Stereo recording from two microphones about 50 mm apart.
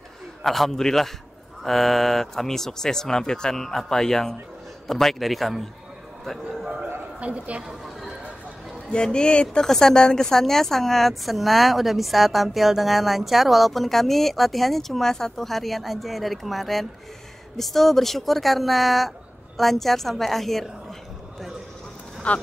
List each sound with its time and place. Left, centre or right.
0.4 s a woman's voice: centre
7.2 s a woman's voice: right
8.9 s a woman's voice: centre
22.3 s speech: left